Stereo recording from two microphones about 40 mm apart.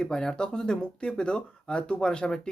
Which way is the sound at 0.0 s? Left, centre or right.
Centre.